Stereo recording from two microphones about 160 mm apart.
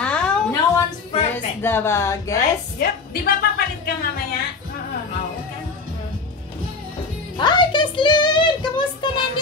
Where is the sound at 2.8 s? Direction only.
75° left (ahead or behind).